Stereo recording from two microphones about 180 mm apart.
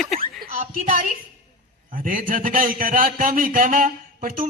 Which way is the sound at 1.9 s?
50° right (ahead or behind).